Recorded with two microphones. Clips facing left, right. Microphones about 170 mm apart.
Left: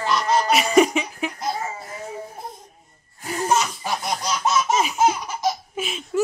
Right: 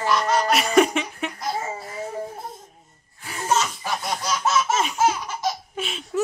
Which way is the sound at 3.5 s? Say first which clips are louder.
Even; 15° left (ahead or behind).